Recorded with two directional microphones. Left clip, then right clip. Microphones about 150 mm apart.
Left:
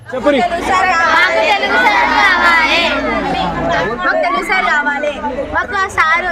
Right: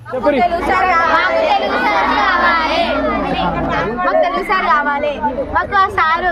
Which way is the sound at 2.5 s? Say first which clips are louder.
Left 3 dB; 90° right.